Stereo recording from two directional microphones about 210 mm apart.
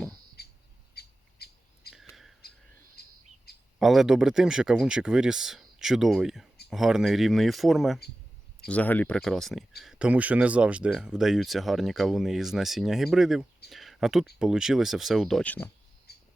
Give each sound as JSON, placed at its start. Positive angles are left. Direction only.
{"t": 0.4, "sound": "squawk", "side_deg": 50}
{"t": 0.9, "sound": "bird", "side_deg": 50}
{"t": 3.0, "sound": "bird", "side_deg": 50}
{"t": 3.8, "sound": "speech", "side_deg": 0}
{"t": 16.1, "sound": "squawk", "side_deg": 50}